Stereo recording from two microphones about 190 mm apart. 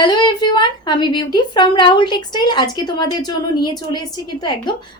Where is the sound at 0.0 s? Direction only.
20° left (ahead or behind).